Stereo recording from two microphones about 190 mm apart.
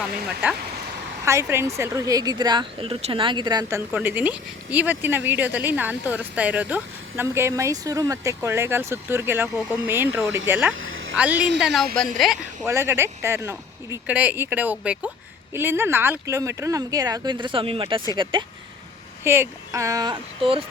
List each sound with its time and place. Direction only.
0.4 s speech: 10° right (ahead or behind)
10.8 s a sound: 90° right
11.6 s speech: centre (ahead or behind)
12.6 s speech: 15° right (ahead or behind)
19.2 s speech: 15° right (ahead or behind)